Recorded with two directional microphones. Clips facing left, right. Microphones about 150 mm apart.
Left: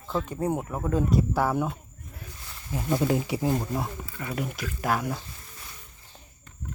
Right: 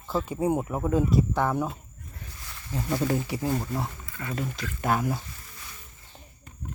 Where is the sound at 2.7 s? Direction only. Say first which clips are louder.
Left 2 dB; 15° left (ahead or behind); by 5.2 s centre (ahead or behind).